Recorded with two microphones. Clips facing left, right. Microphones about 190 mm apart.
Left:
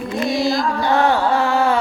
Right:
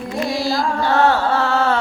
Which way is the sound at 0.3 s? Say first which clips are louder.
Left 2 dB; 20° left (ahead or behind).